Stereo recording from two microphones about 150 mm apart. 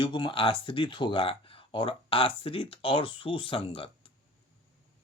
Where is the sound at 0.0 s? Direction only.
35° left (ahead or behind).